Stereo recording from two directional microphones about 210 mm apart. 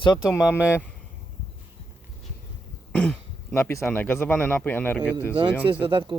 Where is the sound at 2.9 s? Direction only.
5° left (ahead or behind).